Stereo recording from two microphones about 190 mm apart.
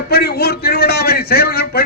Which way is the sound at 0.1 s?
55° left (ahead or behind).